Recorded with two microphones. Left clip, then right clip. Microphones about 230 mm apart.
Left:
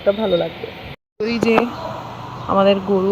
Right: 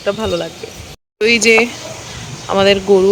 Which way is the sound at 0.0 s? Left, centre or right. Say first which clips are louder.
Left 1 dB; centre.